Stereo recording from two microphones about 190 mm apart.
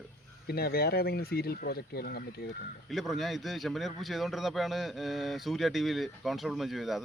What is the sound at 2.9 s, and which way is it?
A man's voice, centre (ahead or behind).